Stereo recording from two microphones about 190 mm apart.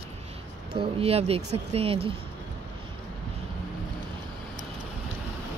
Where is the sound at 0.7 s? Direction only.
30° right (ahead or behind).